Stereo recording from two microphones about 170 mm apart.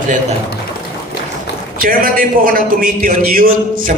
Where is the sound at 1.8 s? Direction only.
55° right (ahead or behind).